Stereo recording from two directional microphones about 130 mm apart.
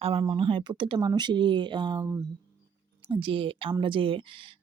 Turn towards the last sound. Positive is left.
turn(degrees=-40)  # may be behind; listen again after turning